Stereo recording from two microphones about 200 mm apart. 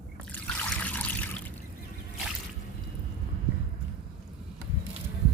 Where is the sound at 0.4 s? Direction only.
5° left (ahead or behind).